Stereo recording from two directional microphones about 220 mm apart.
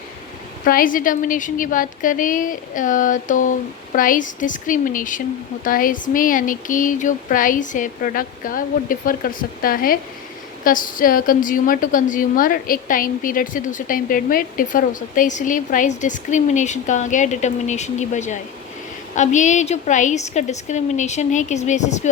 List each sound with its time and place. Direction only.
0.6 s a woman's voice: 40° left (ahead or behind)